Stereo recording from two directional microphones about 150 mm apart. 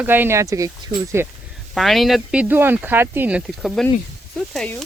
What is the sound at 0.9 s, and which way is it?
Speech, 30° right (ahead or behind).